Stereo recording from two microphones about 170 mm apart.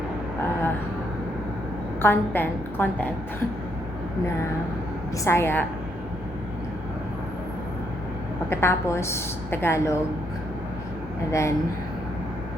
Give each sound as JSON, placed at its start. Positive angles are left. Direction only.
{"t": 2.0, "sound": "a woman's voice", "side_deg": 10}
{"t": 5.2, "sound": "a woman's voice", "side_deg": 15}
{"t": 8.4, "sound": "a woman's voice", "side_deg": 15}
{"t": 11.3, "sound": "a woman's voice", "side_deg": 15}